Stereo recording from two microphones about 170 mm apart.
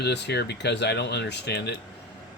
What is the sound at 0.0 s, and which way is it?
Speech, 80° left.